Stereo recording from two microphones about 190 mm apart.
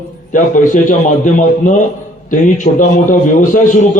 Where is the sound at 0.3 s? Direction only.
40° left (ahead or behind).